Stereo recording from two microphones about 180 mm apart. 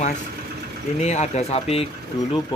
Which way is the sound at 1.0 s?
35° left (ahead or behind).